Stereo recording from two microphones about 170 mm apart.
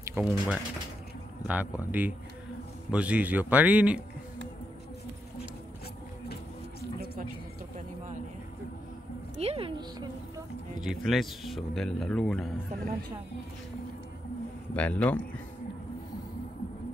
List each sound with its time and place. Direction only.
0.1 s speech: 10° right (ahead or behind)
9.4 s a woman's voice: 35° right (ahead or behind)
11.0 s speech: centre (ahead or behind)
14.7 s a man's voice: 10° left (ahead or behind)